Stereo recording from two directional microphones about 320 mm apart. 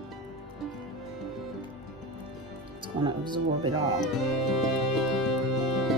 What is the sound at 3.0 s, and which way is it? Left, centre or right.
Speech, centre.